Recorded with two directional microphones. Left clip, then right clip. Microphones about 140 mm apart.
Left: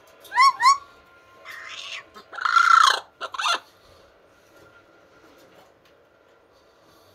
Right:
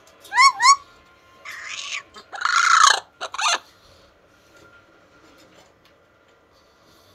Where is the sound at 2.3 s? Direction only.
25° left (ahead or behind).